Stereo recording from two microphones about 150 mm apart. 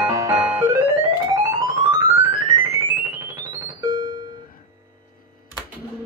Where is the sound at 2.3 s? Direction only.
70° left (ahead or behind).